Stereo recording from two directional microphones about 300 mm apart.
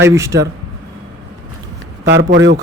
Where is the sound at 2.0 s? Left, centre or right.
Right.